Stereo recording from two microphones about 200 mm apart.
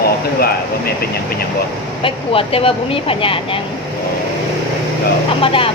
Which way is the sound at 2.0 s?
25° left (ahead or behind).